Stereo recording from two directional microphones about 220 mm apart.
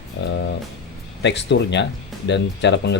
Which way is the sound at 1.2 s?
55° left (ahead or behind).